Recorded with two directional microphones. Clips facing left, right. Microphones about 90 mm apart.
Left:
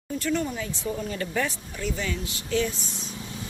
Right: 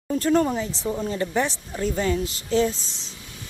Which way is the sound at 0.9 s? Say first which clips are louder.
Right 4 dB; 25° right (ahead or behind).